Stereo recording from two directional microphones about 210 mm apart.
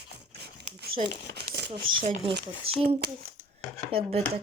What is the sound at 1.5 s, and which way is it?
Speech, 65° right (ahead or behind).